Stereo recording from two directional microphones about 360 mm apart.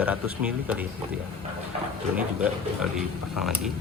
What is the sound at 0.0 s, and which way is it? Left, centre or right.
Speech, centre.